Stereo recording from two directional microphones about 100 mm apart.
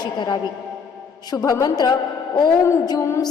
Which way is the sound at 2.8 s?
30° left (ahead or behind).